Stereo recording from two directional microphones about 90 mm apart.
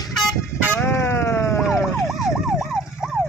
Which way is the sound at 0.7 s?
20° left (ahead or behind).